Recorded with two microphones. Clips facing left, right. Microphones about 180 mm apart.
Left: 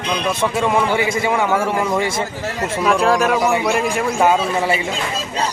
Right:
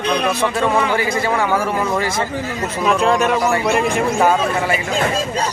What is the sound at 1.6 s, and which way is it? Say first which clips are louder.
Speech: left 1 dB; 25° left (ahead or behind).